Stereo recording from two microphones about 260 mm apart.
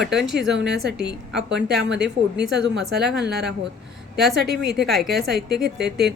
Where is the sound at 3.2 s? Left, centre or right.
Right.